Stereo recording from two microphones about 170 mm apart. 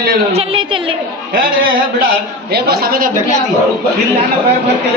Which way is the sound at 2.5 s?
65° right (ahead or behind).